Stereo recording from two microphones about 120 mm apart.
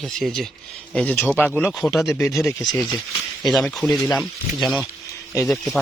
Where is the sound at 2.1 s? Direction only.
20° left (ahead or behind).